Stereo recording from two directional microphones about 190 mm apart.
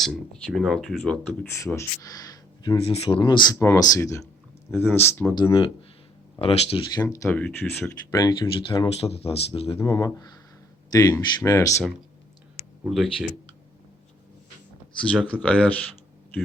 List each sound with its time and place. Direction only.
0.0 s speech: centre (ahead or behind)
1.5 s speech: 15° left (ahead or behind)
2.7 s speech: 30° left (ahead or behind); by 5.3 s 10° left (ahead or behind)
5.3 s speech: 25° left (ahead or behind)
7.0 s speech: 15° left (ahead or behind); by 9.7 s 30° left (ahead or behind)
9.7 s speech: 20° left (ahead or behind)
12.9 s speech: centre (ahead or behind)
15.1 s speech: centre (ahead or behind)